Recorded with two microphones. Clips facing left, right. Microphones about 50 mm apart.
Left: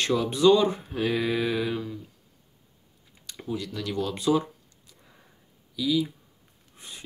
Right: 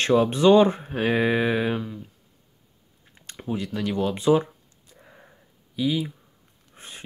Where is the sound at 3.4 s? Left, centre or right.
Right.